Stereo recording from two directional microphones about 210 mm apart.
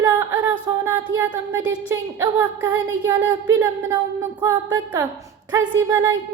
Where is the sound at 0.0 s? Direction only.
15° right (ahead or behind).